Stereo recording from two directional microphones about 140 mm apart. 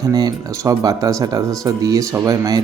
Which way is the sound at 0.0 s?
25° right (ahead or behind).